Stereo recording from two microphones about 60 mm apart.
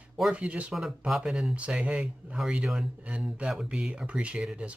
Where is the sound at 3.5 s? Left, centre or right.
Centre.